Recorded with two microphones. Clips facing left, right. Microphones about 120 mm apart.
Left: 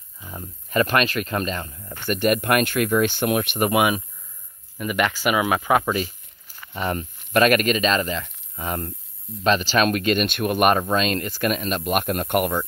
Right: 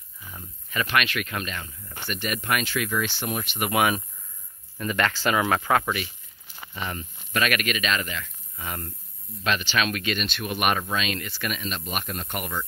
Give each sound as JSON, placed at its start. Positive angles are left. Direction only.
{"t": 0.2, "sound": "speech", "side_deg": 35}
{"t": 2.0, "sound": "speech", "side_deg": 50}
{"t": 3.7, "sound": "speech", "side_deg": 15}
{"t": 5.9, "sound": "a sound", "side_deg": 40}
{"t": 6.8, "sound": "speech", "side_deg": 40}